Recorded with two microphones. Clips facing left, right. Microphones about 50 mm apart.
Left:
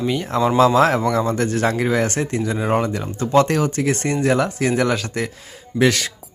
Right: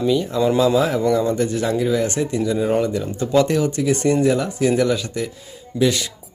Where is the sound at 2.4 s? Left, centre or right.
Left.